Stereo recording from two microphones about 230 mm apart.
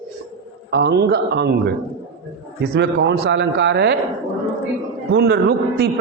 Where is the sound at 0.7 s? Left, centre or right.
Right.